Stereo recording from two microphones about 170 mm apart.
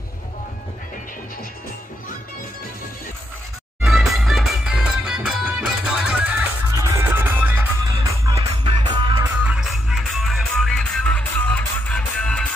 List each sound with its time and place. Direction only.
3.8 s music: centre (ahead or behind); by 9.2 s 25° right (ahead or behind)
9.4 s music: 5° right (ahead or behind)